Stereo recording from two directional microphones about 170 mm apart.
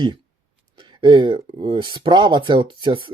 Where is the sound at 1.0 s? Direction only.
30° right (ahead or behind).